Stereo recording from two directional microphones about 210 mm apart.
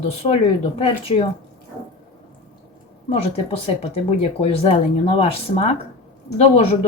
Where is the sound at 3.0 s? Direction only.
30° left (ahead or behind).